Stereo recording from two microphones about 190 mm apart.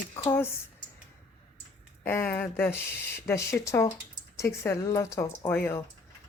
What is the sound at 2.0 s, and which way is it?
Speech, 10° left (ahead or behind).